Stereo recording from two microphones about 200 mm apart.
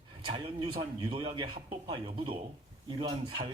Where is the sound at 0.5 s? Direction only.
25° right (ahead or behind).